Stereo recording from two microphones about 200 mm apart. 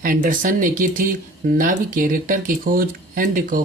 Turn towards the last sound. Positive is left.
turn(degrees=-45)  # may be behind; listen again after turning